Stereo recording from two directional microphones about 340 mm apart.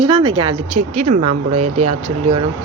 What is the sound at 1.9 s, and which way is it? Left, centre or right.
Speech, centre.